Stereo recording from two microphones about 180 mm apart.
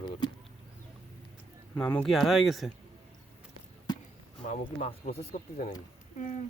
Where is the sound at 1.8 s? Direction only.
5° left (ahead or behind).